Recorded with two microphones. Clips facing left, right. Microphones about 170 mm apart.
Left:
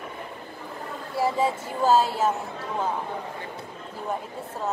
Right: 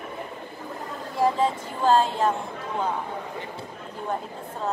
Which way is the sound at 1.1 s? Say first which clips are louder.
Right 1 dB; 10° left (ahead or behind).